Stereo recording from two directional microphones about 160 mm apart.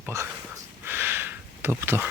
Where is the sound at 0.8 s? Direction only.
15° right (ahead or behind).